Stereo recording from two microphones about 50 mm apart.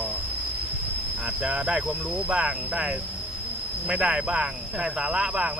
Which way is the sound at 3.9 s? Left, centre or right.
Centre.